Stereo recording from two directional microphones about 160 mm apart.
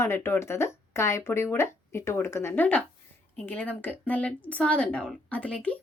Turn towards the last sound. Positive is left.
turn(degrees=5)  # may be behind; listen again after turning